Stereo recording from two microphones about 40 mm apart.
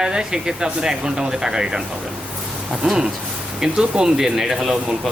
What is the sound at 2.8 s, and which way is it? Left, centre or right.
Speech, right.